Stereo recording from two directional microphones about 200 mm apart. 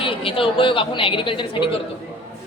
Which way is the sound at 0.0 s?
25° left (ahead or behind).